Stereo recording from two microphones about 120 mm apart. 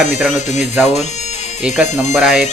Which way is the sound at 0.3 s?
75° left (ahead or behind).